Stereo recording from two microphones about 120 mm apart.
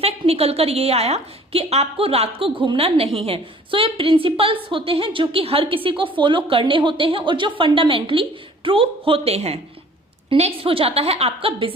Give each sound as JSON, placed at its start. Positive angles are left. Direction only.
{"t": 0.0, "sound": "a woman's voice", "side_deg": -55}